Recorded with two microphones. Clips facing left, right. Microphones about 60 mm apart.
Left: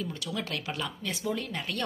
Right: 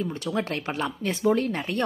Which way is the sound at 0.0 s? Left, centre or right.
Right.